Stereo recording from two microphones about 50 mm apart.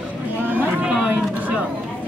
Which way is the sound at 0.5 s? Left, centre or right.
Right.